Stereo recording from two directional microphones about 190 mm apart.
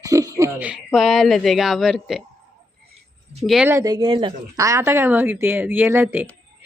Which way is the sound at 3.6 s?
15° right (ahead or behind).